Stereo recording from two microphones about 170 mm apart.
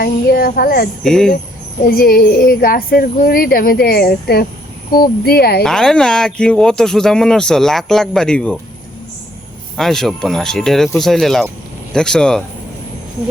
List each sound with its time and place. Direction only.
0.0 s speech: 60° left (ahead or behind)
1.0 s speech: 5° left (ahead or behind)
1.8 s speech: 60° left (ahead or behind)
5.6 s speech: 5° left (ahead or behind)
9.7 s speech: centre (ahead or behind)